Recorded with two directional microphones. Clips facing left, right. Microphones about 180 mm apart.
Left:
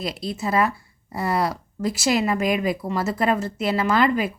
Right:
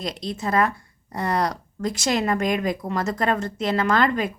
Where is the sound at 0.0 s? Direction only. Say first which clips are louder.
Left 1 dB; 5° left (ahead or behind).